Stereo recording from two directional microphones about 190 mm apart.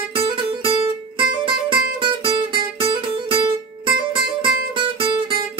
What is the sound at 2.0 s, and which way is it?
Music, 25° right (ahead or behind).